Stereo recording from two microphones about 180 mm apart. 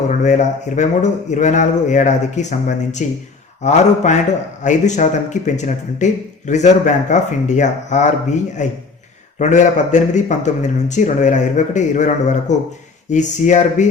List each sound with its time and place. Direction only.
0.1 s a man's voice: 40° left (ahead or behind)